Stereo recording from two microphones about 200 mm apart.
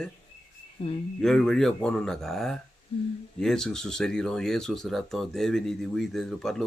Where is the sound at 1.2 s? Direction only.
5° left (ahead or behind).